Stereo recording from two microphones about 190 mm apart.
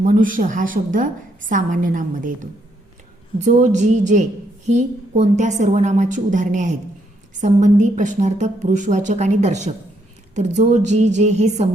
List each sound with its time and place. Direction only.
0.0 s a woman's voice: 45° right (ahead or behind)